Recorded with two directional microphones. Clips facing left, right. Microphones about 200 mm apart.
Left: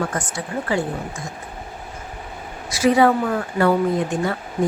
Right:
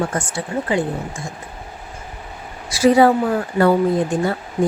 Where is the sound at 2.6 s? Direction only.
30° right (ahead or behind).